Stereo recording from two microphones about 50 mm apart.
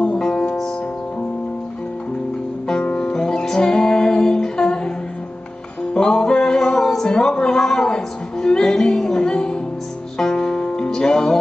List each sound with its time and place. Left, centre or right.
0.0 s music: centre
2.8 s music: left
3.1 s music: centre
5.9 s music: centre